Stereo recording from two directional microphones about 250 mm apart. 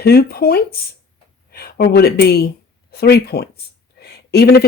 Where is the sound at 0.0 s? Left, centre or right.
Left.